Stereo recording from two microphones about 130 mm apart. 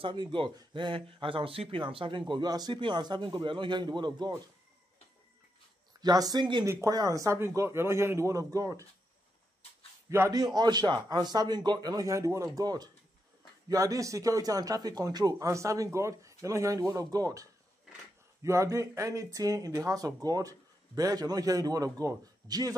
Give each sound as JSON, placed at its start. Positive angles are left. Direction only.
{"t": 0.0, "sound": "speech", "side_deg": -40}
{"t": 5.9, "sound": "speech", "side_deg": -30}
{"t": 6.6, "sound": "speech", "side_deg": -25}
{"t": 10.0, "sound": "speech", "side_deg": -25}